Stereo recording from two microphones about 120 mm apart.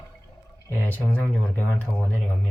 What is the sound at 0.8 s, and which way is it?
Speech, 15° left (ahead or behind).